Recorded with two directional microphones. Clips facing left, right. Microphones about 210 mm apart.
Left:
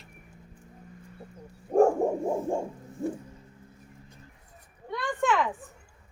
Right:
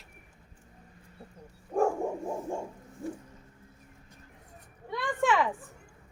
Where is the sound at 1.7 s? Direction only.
40° left (ahead or behind).